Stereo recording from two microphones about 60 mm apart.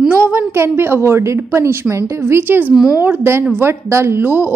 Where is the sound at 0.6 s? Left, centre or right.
Right.